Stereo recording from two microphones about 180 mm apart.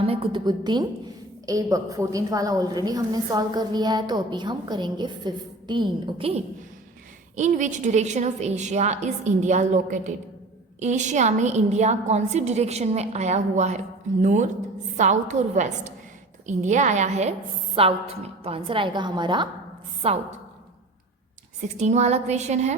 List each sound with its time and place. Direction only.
0.0 s a woman's voice: 30° right (ahead or behind)
7.3 s a woman's voice: 40° right (ahead or behind)
21.8 s a woman's voice: 40° right (ahead or behind)